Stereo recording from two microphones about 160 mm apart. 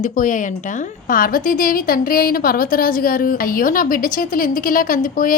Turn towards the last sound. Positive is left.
turn(degrees=60)  # may be behind; listen again after turning